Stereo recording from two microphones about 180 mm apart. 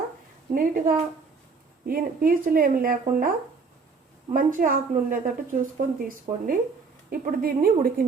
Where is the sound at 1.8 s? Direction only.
50° right (ahead or behind).